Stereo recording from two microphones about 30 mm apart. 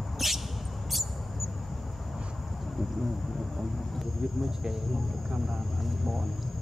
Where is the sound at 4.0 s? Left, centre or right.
Centre.